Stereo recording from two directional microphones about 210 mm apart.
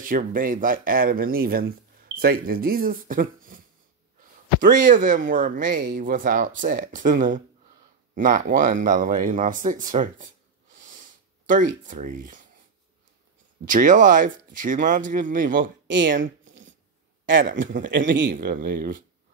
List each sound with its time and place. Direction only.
0.0 s a man's voice: 40° right (ahead or behind)
10.2 s a sound: 40° right (ahead or behind)
13.7 s speech: 40° right (ahead or behind)
16.4 s a sound: 60° right (ahead or behind)
17.9 s speech: 60° right (ahead or behind)
18.3 s speech: 45° right (ahead or behind)